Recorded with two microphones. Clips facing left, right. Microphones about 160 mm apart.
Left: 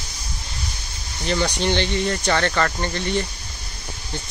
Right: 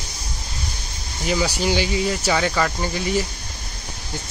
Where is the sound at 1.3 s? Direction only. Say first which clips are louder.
Even; 5° right (ahead or behind).